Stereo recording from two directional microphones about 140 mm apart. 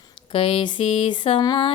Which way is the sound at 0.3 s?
45° left (ahead or behind).